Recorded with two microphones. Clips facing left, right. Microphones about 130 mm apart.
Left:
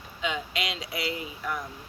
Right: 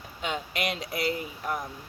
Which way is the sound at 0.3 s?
50° right (ahead or behind).